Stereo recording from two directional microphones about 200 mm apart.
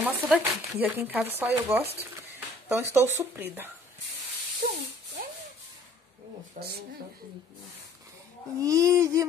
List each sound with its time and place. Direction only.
0.0 s speech: 10° right (ahead or behind)
4.6 s a sound: 45° right (ahead or behind)
6.6 s speech: 40° right (ahead or behind)
8.5 s speech: 15° right (ahead or behind)